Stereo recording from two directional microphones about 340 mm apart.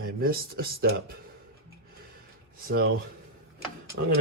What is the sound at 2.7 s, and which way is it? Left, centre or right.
Speech, right.